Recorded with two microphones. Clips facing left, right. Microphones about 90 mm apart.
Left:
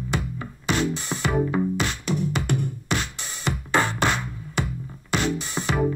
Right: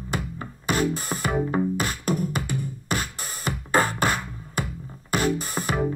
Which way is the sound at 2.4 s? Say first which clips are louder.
Left 4 dB; 65° left (ahead or behind).